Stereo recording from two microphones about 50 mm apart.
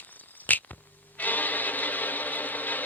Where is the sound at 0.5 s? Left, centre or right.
Left.